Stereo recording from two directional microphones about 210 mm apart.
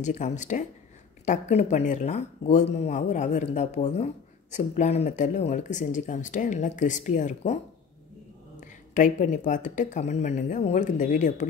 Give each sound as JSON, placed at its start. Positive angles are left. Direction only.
{"t": 0.0, "sound": "speech", "side_deg": 35}
{"t": 8.5, "sound": "speech", "side_deg": 35}